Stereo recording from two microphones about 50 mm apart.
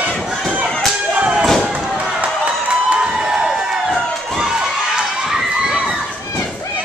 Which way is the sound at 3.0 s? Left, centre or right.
Centre.